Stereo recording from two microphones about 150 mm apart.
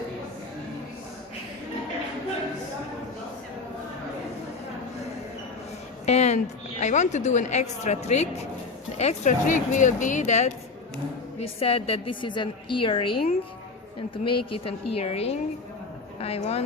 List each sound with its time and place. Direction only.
6.1 s a woman's voice: 50° left (ahead or behind)
11.3 s a woman's voice: 40° left (ahead or behind)
14.3 s a woman's voice: 40° left (ahead or behind)